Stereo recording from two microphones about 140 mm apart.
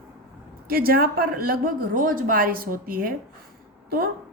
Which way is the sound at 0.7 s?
90° right.